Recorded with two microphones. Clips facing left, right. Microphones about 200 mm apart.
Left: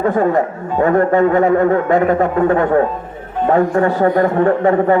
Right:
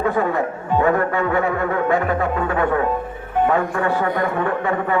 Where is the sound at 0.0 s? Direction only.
45° left (ahead or behind).